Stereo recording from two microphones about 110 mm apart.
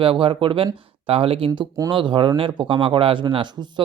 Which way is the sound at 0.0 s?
55° right (ahead or behind).